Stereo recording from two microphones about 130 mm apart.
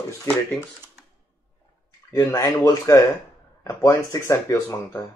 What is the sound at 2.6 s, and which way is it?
Speech, 25° left (ahead or behind).